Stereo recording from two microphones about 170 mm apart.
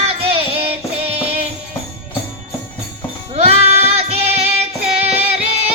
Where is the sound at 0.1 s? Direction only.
35° right (ahead or behind).